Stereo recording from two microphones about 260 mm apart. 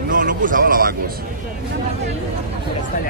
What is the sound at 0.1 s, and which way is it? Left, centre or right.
Speech, right.